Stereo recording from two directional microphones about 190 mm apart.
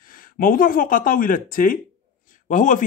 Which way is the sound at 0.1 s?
45° left (ahead or behind).